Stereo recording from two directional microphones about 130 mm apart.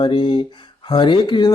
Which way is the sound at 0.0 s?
40° left (ahead or behind).